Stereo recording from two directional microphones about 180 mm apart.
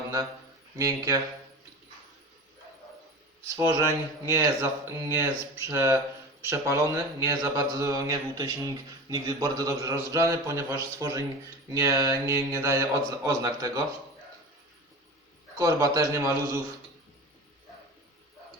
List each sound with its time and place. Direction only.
0.8 s speech: 20° right (ahead or behind)
3.5 s speech: 15° right (ahead or behind)
15.5 s speech: 20° right (ahead or behind)